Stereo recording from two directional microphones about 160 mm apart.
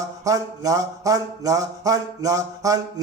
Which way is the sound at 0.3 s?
20° right (ahead or behind).